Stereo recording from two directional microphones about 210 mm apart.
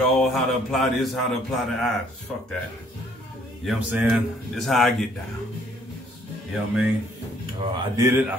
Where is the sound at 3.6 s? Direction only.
5° right (ahead or behind).